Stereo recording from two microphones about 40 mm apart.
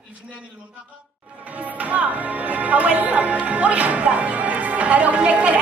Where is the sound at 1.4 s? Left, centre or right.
Right.